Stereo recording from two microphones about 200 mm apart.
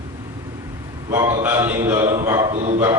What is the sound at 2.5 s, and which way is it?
Speech, 35° right (ahead or behind).